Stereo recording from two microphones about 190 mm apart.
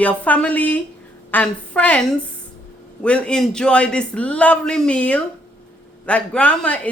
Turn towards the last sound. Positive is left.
turn(degrees=5)  # may be behind; listen again after turning